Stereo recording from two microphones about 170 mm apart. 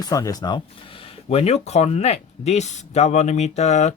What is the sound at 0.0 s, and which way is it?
Speech, 20° left (ahead or behind).